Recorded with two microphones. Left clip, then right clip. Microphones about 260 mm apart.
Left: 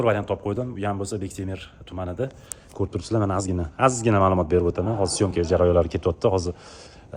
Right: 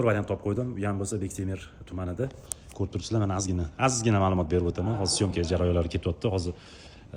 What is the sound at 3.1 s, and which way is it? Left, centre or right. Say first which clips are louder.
Speech: left 6 dB; left.